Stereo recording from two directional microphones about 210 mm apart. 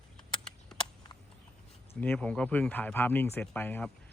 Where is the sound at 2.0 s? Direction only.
5° left (ahead or behind).